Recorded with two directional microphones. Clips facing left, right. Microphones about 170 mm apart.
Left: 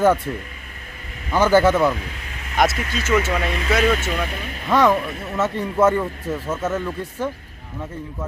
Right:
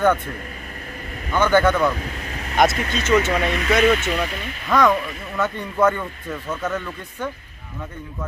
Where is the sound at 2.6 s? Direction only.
Centre (ahead or behind).